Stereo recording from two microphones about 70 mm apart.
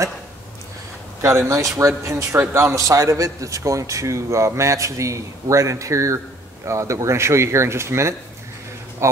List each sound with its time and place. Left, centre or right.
1.2 s a man's voice: right